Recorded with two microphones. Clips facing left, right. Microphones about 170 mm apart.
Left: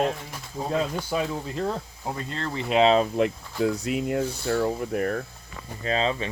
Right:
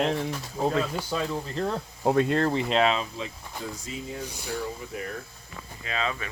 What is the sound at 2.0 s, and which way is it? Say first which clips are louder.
Speech: right 12 dB; 70° right (ahead or behind).